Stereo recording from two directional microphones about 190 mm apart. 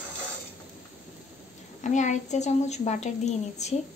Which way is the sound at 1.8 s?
40° left (ahead or behind).